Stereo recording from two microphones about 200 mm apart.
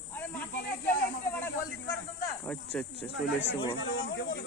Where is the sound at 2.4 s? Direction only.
5° left (ahead or behind).